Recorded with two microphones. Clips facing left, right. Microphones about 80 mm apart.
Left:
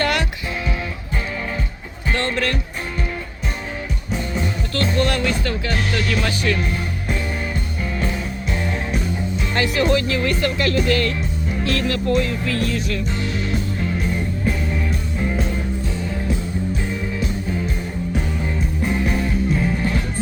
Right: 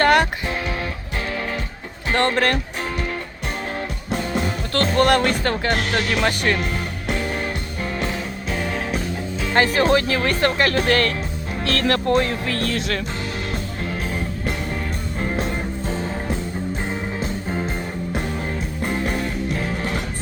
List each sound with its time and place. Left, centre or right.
0.0 s music: right
2.1 s speech: right
4.1 s music: right
6.2 s speech: right
9.5 s speech: right
11.6 s speech: right
12.7 s music: right
15.2 s music: right
18.9 s music: right